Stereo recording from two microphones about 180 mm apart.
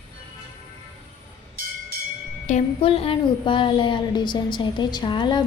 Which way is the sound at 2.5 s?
30° left (ahead or behind).